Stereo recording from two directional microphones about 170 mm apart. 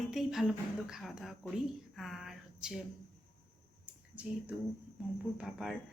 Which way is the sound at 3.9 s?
10° right (ahead or behind).